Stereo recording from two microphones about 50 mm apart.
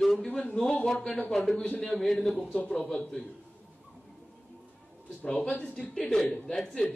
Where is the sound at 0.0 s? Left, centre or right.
Centre.